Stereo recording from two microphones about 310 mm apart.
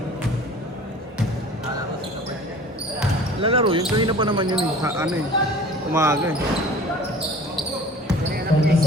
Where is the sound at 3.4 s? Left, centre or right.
Centre.